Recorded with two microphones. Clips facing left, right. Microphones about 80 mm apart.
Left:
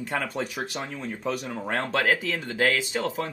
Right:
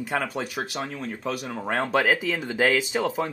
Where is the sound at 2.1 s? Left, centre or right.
Centre.